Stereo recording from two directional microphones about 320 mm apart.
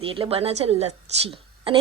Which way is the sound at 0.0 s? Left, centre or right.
Centre.